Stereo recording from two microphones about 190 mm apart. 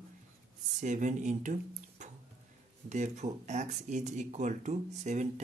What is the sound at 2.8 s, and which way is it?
Speech, 35° right (ahead or behind).